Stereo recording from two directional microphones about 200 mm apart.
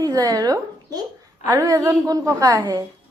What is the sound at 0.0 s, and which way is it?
A woman's voice, 20° right (ahead or behind).